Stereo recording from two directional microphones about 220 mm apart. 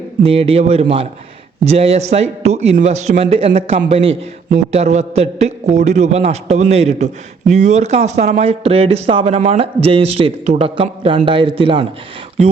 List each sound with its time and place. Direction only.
0.2 s speech: 25° right (ahead or behind)